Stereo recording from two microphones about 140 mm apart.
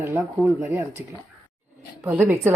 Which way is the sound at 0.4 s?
20° right (ahead or behind).